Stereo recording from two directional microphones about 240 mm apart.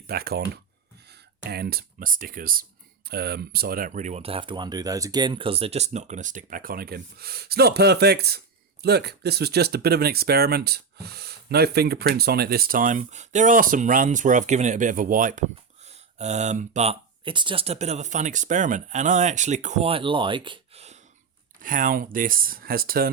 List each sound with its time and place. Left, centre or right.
0.1 s speech: right